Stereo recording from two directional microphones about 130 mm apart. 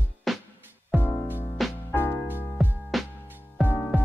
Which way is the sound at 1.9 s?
15° left (ahead or behind).